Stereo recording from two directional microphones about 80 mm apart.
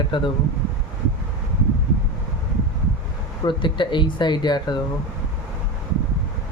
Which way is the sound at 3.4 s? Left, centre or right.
Left.